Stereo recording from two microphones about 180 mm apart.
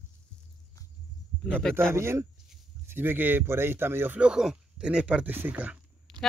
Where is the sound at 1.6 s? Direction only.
5° left (ahead or behind).